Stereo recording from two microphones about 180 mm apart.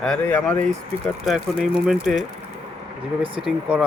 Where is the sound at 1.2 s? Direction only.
Centre (ahead or behind).